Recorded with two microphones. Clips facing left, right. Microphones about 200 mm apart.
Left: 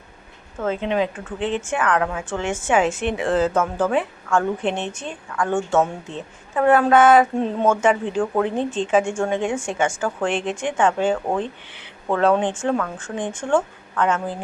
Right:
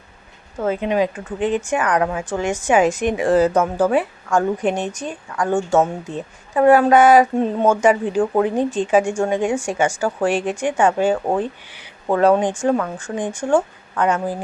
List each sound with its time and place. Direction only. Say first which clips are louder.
0.6 s speech: right 3 dB; 10° right (ahead or behind)
4.9 s a woman's voice: right 2 dB; 40° right (ahead or behind)
5.5 s speech: right 3 dB; 10° right (ahead or behind)
8.2 s speech: right 4 dB; 20° right (ahead or behind)
8.4 s a woman's voice: right 3 dB; 10° right (ahead or behind)